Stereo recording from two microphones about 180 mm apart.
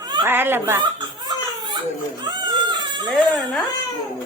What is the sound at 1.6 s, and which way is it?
Baby cry, 25° right (ahead or behind).